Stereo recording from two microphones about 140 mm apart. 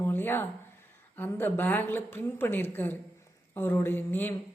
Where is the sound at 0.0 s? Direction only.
15° left (ahead or behind).